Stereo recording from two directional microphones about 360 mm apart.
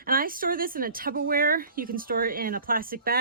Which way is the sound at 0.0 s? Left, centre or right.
Right.